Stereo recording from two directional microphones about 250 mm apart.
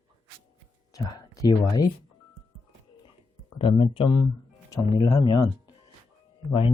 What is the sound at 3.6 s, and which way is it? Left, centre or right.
Speech, left.